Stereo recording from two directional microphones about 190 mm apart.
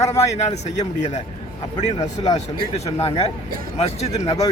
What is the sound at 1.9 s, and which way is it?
Speech, 20° left (ahead or behind).